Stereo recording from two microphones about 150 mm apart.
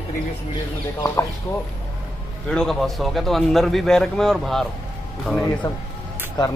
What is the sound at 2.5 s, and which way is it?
A man's voice, 5° left (ahead or behind).